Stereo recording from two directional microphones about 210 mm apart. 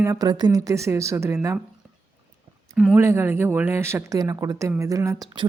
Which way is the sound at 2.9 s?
10° right (ahead or behind).